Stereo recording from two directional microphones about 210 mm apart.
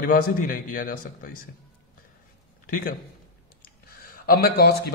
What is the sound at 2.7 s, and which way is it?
A man's voice, 40° left (ahead or behind).